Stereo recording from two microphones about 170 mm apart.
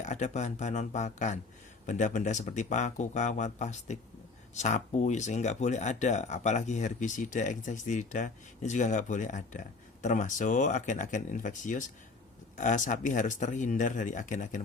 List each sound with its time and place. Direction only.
0.0 s speech: 45° left (ahead or behind)